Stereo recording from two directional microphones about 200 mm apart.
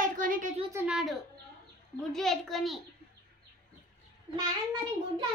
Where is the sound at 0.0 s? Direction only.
40° right (ahead or behind).